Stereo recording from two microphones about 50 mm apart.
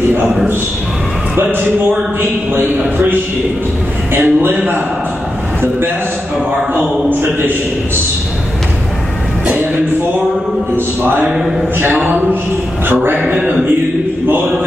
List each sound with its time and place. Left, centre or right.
1.3 s a man's voice: right
4.1 s a man's voice: right
6.7 s a man's voice: right
11.8 s a man's voice: right
12.8 s a man's voice: right